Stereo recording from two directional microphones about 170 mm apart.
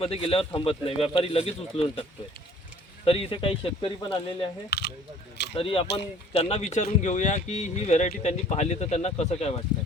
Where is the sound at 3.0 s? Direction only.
35° left (ahead or behind).